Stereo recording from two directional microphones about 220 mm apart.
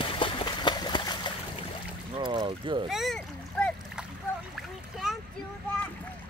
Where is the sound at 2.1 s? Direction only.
20° right (ahead or behind).